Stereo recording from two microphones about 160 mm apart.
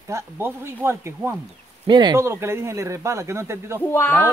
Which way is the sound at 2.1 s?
15° right (ahead or behind).